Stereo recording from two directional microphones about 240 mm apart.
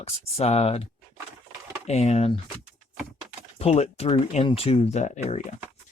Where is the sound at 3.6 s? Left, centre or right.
Left.